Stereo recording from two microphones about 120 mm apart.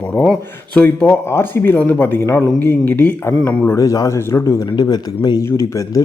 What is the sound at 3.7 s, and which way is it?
Speech, 30° left (ahead or behind).